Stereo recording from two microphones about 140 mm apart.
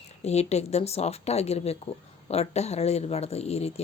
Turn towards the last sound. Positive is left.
turn(degrees=50)  # may be behind; listen again after turning